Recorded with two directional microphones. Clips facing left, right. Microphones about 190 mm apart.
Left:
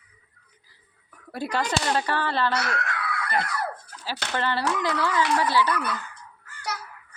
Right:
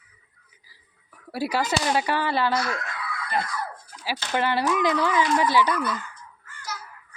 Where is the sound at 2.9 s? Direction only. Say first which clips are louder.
Left 3 dB; 70° left (ahead or behind).